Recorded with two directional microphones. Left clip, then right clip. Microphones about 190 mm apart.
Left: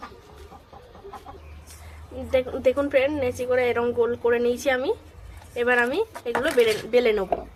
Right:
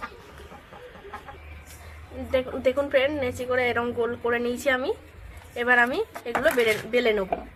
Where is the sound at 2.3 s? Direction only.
15° left (ahead or behind).